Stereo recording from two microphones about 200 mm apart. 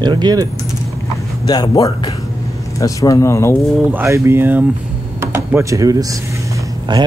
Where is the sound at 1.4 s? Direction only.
20° left (ahead or behind).